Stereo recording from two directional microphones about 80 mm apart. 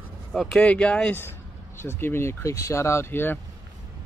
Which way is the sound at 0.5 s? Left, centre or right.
Centre.